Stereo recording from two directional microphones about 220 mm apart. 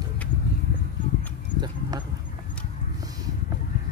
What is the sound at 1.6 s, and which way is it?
Horse, 20° right (ahead or behind).